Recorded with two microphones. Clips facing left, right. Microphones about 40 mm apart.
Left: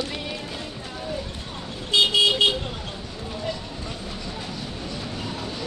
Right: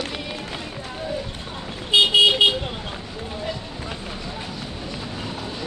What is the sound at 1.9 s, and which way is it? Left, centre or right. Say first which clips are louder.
Vehicle: right 4 dB; centre.